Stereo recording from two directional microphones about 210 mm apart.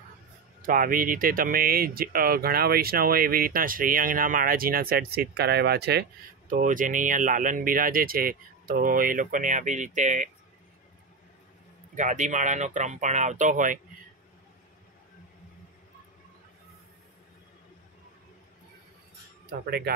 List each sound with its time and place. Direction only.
0.6 s speech: 40° right (ahead or behind)
6.5 s speech: 40° right (ahead or behind)
11.9 s speech: 35° right (ahead or behind)
19.6 s speech: 50° right (ahead or behind)